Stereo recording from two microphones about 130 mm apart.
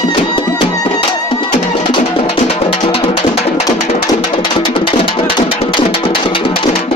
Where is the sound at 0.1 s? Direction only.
40° left (ahead or behind).